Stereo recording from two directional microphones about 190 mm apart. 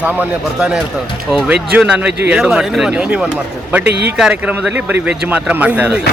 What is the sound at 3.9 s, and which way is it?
Speech, 60° right (ahead or behind).